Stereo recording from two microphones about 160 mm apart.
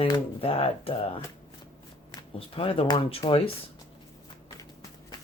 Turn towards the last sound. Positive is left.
turn(degrees=35)  # may be behind; listen again after turning